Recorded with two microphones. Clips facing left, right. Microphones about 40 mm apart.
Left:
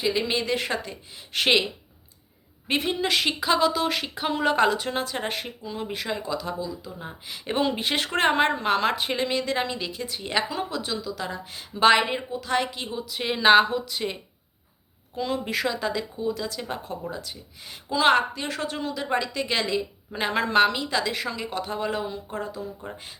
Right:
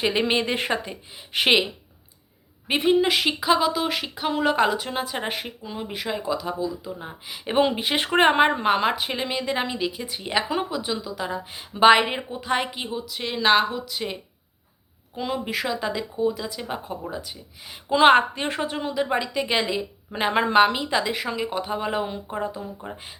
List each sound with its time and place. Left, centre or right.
0.0 s a woman's voice: right; by 1.6 s centre
2.6 s a woman's voice: centre
13.1 s speech: centre
15.1 s speech: centre
17.8 s a woman's voice: right
18.6 s a woman's voice: centre